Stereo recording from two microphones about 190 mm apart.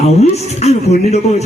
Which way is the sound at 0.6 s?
35° left (ahead or behind).